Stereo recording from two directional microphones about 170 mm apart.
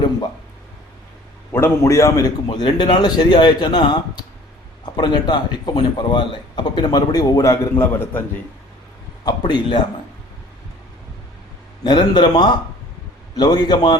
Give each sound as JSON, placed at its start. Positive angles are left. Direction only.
{"t": 1.5, "sound": "speech", "side_deg": 15}
{"t": 9.2, "sound": "speech", "side_deg": 30}
{"t": 11.8, "sound": "speech", "side_deg": 25}